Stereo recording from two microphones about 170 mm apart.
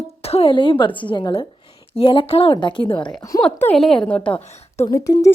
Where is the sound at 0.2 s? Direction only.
35° left (ahead or behind); by 3.4 s 20° left (ahead or behind).